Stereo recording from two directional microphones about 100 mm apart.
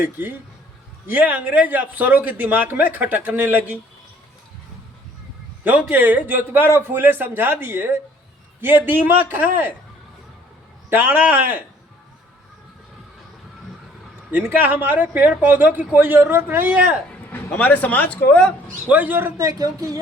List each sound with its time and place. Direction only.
0.0 s speech: 20° right (ahead or behind)
5.6 s speech: 15° right (ahead or behind)
10.8 s speech: 20° right (ahead or behind)
14.3 s speech: 20° right (ahead or behind)
17.2 s speech: 15° left (ahead or behind)
18.9 s speech: 15° right (ahead or behind)
19.4 s speech: 35° right (ahead or behind)